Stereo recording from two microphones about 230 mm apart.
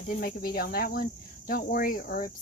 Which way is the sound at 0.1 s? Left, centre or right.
Left.